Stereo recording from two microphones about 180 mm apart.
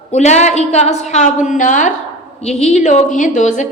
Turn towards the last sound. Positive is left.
turn(degrees=45)  # may be behind; listen again after turning